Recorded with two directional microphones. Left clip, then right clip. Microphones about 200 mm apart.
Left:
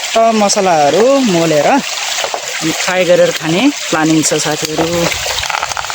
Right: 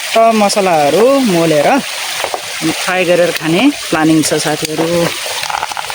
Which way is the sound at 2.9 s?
5° right (ahead or behind).